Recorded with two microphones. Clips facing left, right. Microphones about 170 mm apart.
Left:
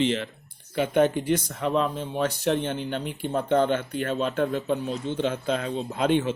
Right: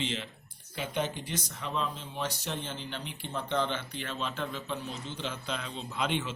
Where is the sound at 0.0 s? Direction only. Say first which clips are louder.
Left 11 dB; 60° left (ahead or behind).